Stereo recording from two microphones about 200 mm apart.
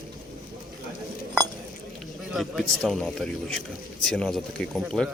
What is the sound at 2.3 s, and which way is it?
Speech, centre (ahead or behind).